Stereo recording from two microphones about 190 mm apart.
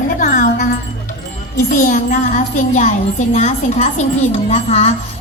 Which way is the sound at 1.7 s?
45° left (ahead or behind).